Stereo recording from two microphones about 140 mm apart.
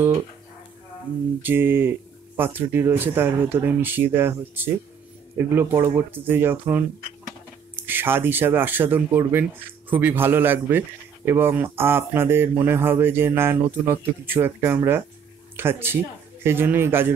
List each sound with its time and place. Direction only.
1.4 s speech: 15° right (ahead or behind)